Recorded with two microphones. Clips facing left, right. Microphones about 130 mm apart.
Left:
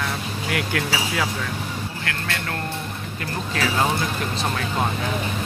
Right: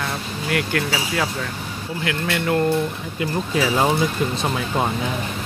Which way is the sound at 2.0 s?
15° right (ahead or behind).